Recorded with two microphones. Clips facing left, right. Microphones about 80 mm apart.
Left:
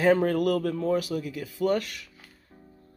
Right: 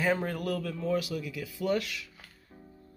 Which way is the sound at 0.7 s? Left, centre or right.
Left.